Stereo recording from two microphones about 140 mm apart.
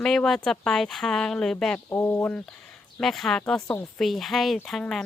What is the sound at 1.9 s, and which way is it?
Speech, 15° left (ahead or behind).